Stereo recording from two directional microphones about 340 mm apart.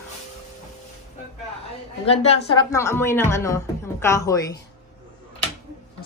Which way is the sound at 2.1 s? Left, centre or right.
Centre.